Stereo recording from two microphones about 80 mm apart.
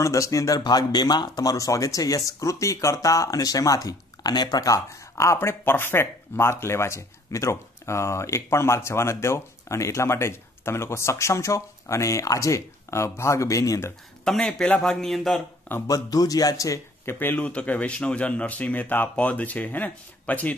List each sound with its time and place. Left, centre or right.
0.0 s speech: left
14.2 s speech: centre
15.9 s speech: left
17.0 s speech: left
17.5 s speech: centre